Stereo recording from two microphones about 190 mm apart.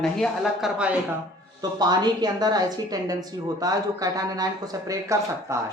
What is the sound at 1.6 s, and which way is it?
Speech, 20° right (ahead or behind).